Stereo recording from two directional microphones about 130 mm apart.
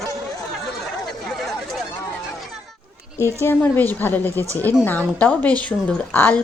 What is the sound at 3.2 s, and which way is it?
A woman's voice, 20° left (ahead or behind).